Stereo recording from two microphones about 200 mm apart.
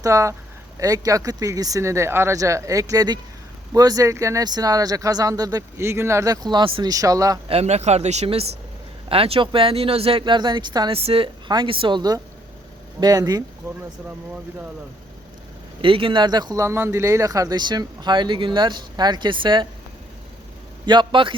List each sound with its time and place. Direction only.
0.0 s speech: 15° right (ahead or behind)
7.5 s speech: 35° right (ahead or behind)
15.8 s speech: 25° right (ahead or behind)
20.8 s speech: 20° right (ahead or behind)